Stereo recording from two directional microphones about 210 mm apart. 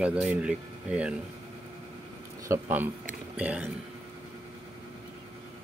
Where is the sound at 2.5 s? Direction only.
10° right (ahead or behind).